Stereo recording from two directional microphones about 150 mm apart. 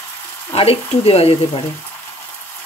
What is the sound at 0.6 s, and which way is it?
Speech, 40° left (ahead or behind).